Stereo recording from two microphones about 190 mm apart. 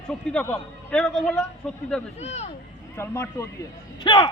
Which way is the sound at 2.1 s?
35° left (ahead or behind).